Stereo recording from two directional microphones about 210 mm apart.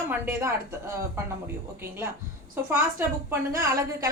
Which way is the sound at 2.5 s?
10° right (ahead or behind).